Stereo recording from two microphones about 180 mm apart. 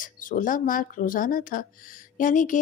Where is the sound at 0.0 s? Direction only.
50° left (ahead or behind).